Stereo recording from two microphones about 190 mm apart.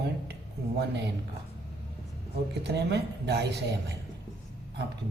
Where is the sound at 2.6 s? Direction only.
60° right (ahead or behind).